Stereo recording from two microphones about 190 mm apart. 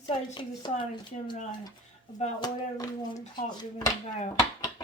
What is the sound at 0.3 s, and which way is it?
Speech, 25° left (ahead or behind).